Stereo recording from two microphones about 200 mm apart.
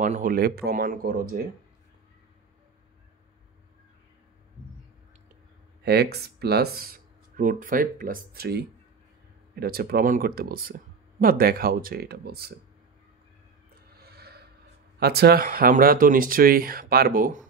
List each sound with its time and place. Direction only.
0.0 s speech: 40° right (ahead or behind)
5.9 s speech: 55° right (ahead or behind)
13.9 s music: 50° right (ahead or behind)
15.0 s speech: 50° right (ahead or behind)